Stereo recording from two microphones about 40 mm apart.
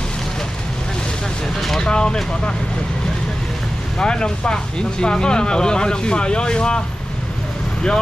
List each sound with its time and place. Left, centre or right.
1.8 s speech: centre
4.0 s speech: left